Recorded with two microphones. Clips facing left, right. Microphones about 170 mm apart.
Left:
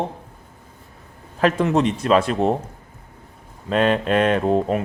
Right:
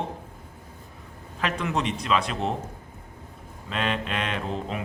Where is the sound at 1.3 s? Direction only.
45° left (ahead or behind).